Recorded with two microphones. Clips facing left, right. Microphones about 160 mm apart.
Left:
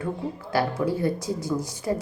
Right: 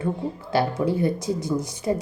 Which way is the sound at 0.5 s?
20° right (ahead or behind).